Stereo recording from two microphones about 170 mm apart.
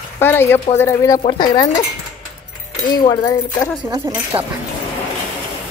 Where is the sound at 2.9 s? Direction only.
25° left (ahead or behind).